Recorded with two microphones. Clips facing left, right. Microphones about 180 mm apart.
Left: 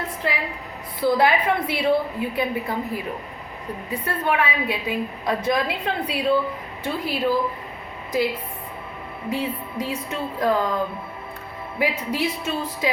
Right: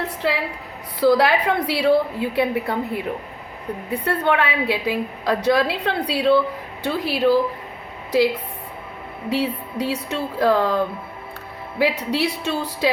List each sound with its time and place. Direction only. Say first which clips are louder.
0.2 s a woman's voice: right 4 dB; 90° right
9.3 s speech: right 4 dB; 75° right (ahead or behind)